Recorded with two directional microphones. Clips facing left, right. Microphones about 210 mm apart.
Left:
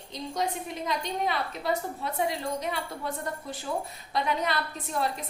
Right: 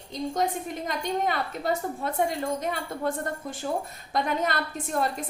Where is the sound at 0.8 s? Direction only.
50° right (ahead or behind).